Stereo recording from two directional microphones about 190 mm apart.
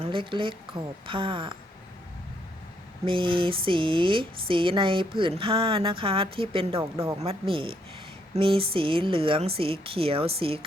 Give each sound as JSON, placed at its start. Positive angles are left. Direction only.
{"t": 0.0, "sound": "speech", "side_deg": -25}
{"t": 3.1, "sound": "speech", "side_deg": -25}